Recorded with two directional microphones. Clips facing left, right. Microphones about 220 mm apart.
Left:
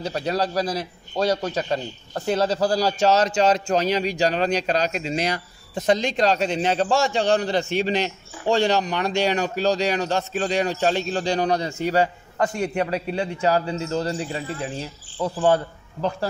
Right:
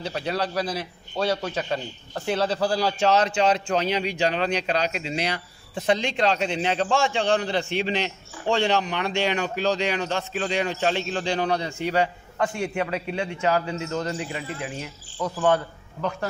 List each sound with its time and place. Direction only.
0.0 s a man's voice: 40° left (ahead or behind)